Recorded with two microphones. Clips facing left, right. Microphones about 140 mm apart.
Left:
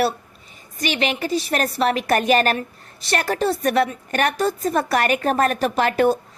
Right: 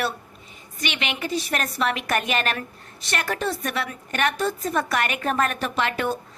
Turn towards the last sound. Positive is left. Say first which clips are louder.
# left 7 dB
turn(degrees=40)  # may be behind; listen again after turning